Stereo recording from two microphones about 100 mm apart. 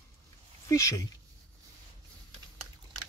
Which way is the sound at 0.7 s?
30° left (ahead or behind).